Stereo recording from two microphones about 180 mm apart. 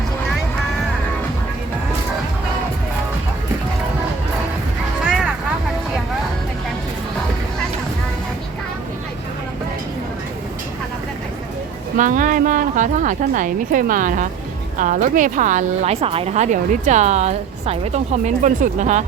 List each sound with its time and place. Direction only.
11.9 s a woman's voice: 45° right (ahead or behind)